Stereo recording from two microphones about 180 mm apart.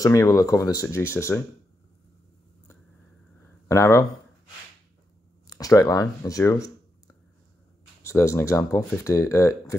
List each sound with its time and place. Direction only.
0.0 s speech: 15° left (ahead or behind)
3.6 s speech: 15° left (ahead or behind)
5.5 s speech: 20° left (ahead or behind)
8.0 s speech: 15° left (ahead or behind)